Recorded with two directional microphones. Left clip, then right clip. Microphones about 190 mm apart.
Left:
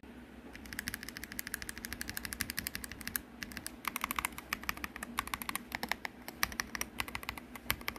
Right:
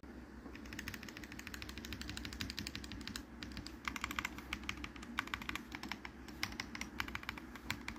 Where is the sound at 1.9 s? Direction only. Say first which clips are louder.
Left 5 dB; 90° left.